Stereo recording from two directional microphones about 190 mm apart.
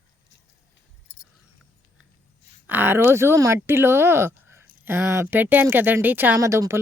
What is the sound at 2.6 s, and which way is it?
Speech, 10° right (ahead or behind).